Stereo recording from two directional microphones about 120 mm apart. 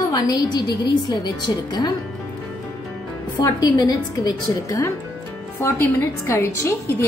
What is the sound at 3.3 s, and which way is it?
A woman's voice, 30° left (ahead or behind).